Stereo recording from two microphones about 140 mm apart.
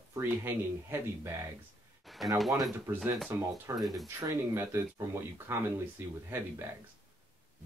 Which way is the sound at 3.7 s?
Centre (ahead or behind).